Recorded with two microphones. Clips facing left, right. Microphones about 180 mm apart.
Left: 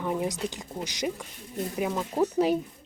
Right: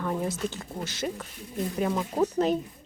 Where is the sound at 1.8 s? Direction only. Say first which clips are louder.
Even; 5° left (ahead or behind).